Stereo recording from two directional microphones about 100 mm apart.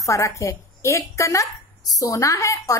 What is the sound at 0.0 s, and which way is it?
A woman's voice, 30° left (ahead or behind).